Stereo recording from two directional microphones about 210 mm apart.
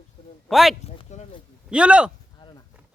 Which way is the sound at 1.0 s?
35° left (ahead or behind).